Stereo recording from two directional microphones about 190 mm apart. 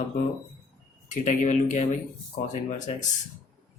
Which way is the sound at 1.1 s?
40° left (ahead or behind).